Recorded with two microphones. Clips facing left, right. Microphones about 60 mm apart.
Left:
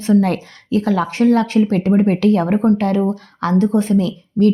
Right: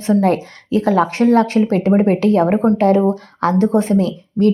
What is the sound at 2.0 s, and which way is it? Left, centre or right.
Speech, centre.